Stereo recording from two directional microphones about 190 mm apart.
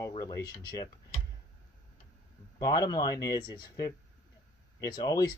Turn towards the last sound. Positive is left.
turn(degrees=20)  # may be behind; listen again after turning